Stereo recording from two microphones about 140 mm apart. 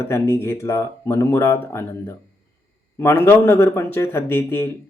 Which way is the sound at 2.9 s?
15° left (ahead or behind).